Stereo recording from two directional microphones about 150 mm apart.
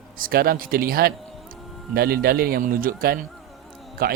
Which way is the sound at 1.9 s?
90° right.